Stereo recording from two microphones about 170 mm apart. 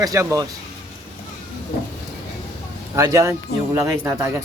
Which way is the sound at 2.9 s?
20° right (ahead or behind).